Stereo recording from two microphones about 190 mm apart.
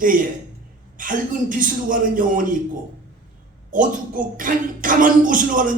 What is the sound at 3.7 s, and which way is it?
Speech, 45° right (ahead or behind).